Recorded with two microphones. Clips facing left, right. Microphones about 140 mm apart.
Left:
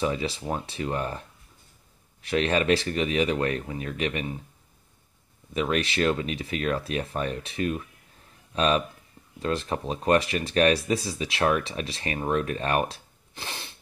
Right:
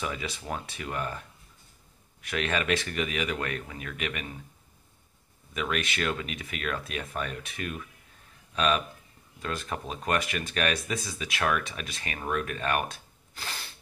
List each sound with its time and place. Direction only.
0.0 s speech: 30° left (ahead or behind)
2.2 s speech: 30° left (ahead or behind)
5.5 s speech: 30° left (ahead or behind)